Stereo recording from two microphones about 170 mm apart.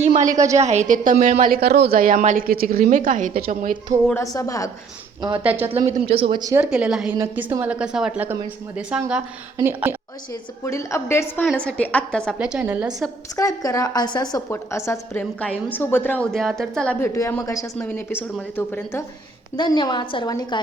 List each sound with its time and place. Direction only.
0.0 s a woman's voice: 45° right (ahead or behind)
4.1 s a woman's voice: 20° left (ahead or behind)
5.4 s a woman's voice: 10° right (ahead or behind)
5.7 s speech: 40° right (ahead or behind)
6.4 s a woman's voice: 15° right (ahead or behind)
6.7 s a woman's voice: 5° right (ahead or behind)
10.6 s a woman's voice: 20° left (ahead or behind); by 13.1 s 5° right (ahead or behind)
13.3 s a woman's voice: 20° left (ahead or behind)
19.5 s a woman's voice: 25° left (ahead or behind)